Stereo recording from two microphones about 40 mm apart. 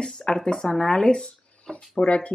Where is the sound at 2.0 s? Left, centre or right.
Left.